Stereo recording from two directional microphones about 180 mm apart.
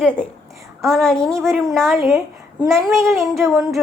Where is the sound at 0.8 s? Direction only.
Centre (ahead or behind).